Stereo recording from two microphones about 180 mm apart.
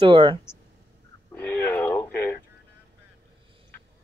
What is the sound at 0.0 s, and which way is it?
Speech, 25° right (ahead or behind).